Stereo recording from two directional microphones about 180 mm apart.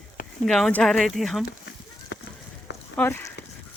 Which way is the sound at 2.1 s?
90° left.